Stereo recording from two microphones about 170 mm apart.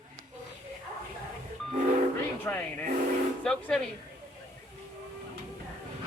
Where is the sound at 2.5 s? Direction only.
15° left (ahead or behind).